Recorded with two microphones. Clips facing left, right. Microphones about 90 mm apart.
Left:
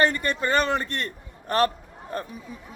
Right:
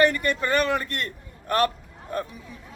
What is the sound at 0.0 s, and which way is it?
A man's voice, 30° left (ahead or behind).